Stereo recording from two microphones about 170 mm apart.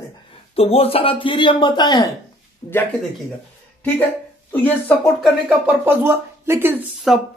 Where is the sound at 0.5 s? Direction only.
35° left (ahead or behind).